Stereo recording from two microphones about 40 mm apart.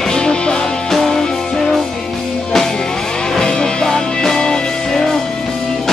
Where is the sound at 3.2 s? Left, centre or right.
Centre.